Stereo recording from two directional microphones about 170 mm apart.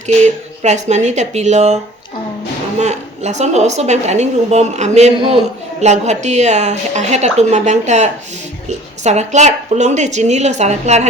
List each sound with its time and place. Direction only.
0.2 s a woman's voice: 40° right (ahead or behind)